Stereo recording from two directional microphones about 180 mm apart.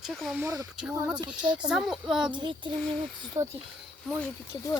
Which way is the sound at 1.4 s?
25° right (ahead or behind).